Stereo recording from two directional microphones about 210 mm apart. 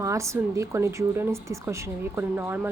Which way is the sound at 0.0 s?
15° right (ahead or behind).